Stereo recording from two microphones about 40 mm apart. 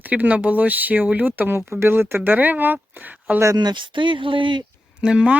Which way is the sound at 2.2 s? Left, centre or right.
Right.